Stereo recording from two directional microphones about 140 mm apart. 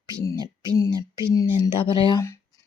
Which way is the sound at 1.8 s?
35° left (ahead or behind).